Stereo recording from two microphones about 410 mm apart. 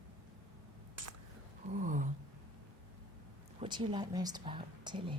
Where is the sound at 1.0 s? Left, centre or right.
Right.